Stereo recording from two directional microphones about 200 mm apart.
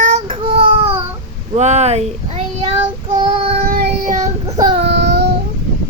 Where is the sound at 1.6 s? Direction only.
35° right (ahead or behind).